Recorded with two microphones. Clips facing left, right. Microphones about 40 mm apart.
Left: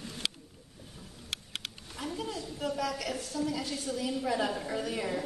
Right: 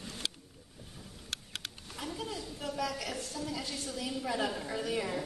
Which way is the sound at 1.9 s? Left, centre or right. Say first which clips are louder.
Left 3 dB; centre.